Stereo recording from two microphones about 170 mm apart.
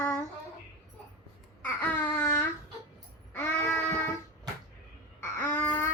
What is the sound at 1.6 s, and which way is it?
Babbling, 10° left (ahead or behind).